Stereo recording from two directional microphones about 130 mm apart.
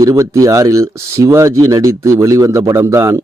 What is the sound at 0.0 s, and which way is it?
Speech, 25° right (ahead or behind).